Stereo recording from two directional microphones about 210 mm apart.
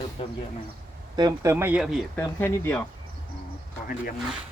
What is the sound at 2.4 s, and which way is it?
Speech, 10° left (ahead or behind).